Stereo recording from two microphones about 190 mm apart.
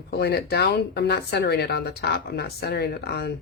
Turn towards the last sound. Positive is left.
turn(degrees=55)  # may be behind; listen again after turning